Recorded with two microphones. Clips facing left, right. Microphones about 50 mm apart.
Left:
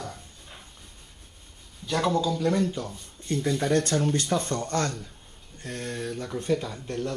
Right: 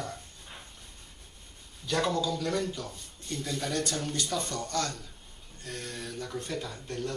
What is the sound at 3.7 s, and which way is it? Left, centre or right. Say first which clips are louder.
Speech: left 9 dB; left.